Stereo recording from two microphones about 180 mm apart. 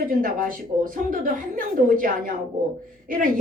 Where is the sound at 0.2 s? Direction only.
50° right (ahead or behind).